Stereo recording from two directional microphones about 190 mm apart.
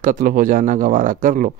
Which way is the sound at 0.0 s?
45° right (ahead or behind).